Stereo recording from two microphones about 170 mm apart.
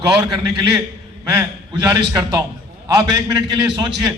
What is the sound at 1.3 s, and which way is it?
A man's voice, 20° right (ahead or behind).